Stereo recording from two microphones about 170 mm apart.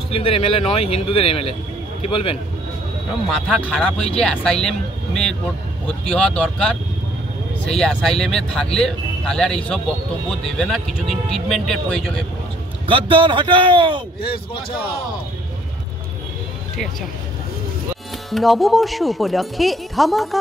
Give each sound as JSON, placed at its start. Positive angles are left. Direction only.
{"t": 0.1, "sound": "speech", "side_deg": 35}
{"t": 3.3, "sound": "speech", "side_deg": 0}
{"t": 10.6, "sound": "speech", "side_deg": 0}
{"t": 12.8, "sound": "speech", "side_deg": -30}
{"t": 14.2, "sound": "speech", "side_deg": 30}
{"t": 18.3, "sound": "speech", "side_deg": 0}